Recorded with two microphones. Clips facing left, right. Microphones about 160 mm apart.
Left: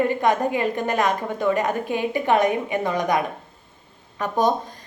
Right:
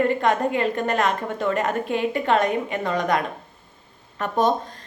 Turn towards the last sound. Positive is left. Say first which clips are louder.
# even
turn(degrees=0)  # may be behind; listen again after turning